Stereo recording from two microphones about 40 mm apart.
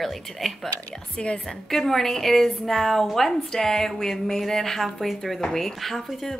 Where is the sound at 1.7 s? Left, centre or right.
Centre.